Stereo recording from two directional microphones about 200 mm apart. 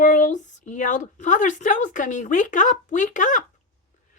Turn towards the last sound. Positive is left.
turn(degrees=40)  # may be behind; listen again after turning